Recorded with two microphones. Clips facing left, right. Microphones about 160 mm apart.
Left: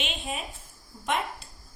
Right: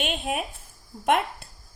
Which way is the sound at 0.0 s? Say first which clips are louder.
Right 6 dB; 55° right (ahead or behind).